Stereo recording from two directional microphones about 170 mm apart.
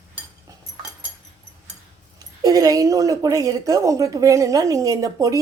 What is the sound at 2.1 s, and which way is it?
Speech, 20° right (ahead or behind).